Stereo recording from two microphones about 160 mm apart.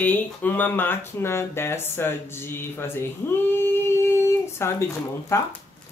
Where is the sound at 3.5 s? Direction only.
15° left (ahead or behind).